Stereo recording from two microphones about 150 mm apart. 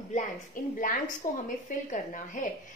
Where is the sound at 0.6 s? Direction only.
65° left (ahead or behind).